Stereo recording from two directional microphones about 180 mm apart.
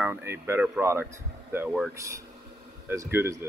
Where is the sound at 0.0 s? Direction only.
10° right (ahead or behind).